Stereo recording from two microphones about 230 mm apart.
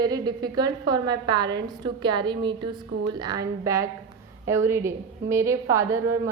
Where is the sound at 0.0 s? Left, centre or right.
Centre.